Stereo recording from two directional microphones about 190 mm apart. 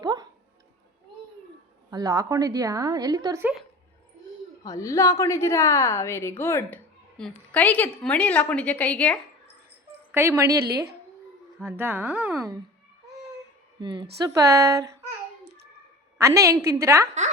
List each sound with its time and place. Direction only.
0.0 s music: 20° right (ahead or behind)
1.9 s a woman's voice: 20° right (ahead or behind)
4.6 s a woman's voice: 15° left (ahead or behind)
10.1 s a woman's voice: 15° right (ahead or behind)
13.8 s a woman's voice: 25° right (ahead or behind)
16.1 s a woman's voice: 15° right (ahead or behind)